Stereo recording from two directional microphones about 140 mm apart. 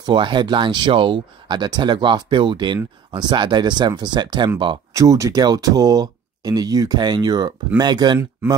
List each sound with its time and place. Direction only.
0.0 s speech: 35° right (ahead or behind)
8.2 s speech: 20° right (ahead or behind)